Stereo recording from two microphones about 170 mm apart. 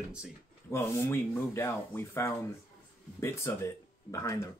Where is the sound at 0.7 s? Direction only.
15° left (ahead or behind).